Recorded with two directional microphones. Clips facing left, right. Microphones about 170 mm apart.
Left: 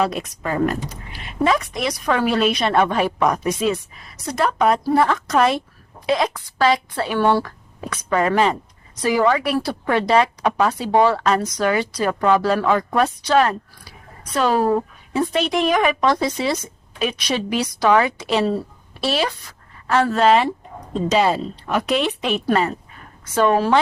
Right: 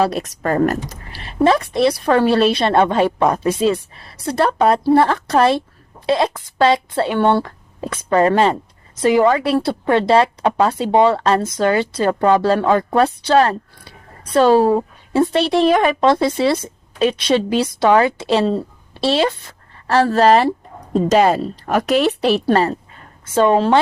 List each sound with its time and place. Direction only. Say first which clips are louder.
0.0 s a woman's voice: right 3 dB; 35° right (ahead or behind)
0.4 s a woman's voice: right 4 dB; 45° right (ahead or behind)
1.2 s a woman's voice: right 4 dB; 35° right (ahead or behind)
23.2 s a woman's voice: right 3 dB; 25° right (ahead or behind)